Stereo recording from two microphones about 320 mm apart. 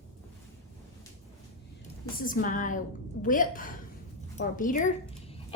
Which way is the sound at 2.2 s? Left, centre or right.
Left.